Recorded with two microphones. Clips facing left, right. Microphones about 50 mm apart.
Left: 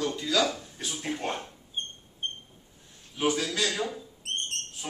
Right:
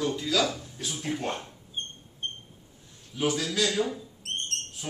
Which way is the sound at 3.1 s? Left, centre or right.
Centre.